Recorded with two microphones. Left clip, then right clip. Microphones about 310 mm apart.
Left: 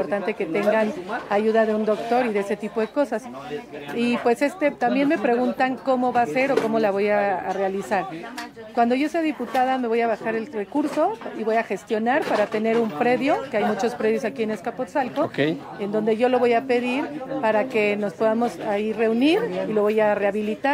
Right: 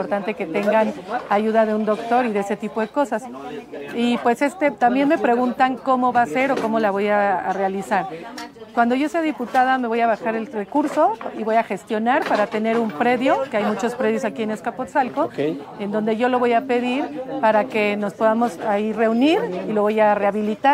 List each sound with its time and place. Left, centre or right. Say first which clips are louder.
0.1 s a woman's voice: right 1 dB; right